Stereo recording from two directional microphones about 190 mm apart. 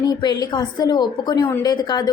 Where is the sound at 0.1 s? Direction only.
20° left (ahead or behind).